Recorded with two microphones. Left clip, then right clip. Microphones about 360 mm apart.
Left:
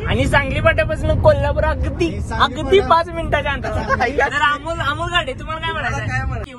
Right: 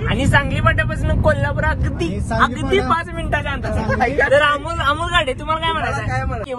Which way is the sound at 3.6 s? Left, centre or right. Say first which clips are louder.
Left 1 dB; centre.